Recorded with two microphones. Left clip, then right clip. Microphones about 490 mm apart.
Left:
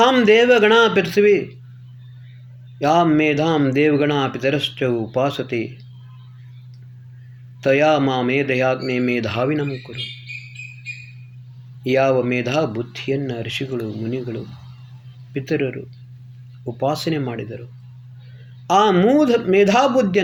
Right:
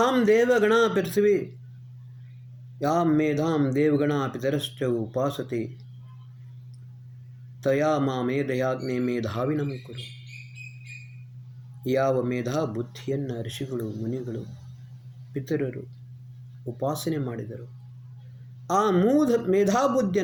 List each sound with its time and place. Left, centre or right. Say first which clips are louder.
0.0 s speech: left 8 dB; right
2.8 s speech: left 8 dB; right
7.6 s speech: left 8 dB; right
11.9 s speech: left 7 dB; right
15.3 s speech: left 7 dB; right
16.8 s speech: left 7 dB; right
18.7 s speech: left 7 dB; right